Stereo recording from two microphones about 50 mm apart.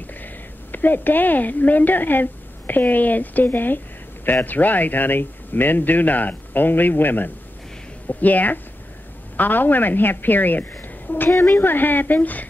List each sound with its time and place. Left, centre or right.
0.0 s a woman's voice: left
11.2 s a woman's voice: left
11.5 s speech: left